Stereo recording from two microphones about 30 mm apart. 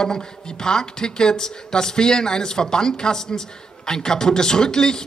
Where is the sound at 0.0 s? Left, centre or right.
Left.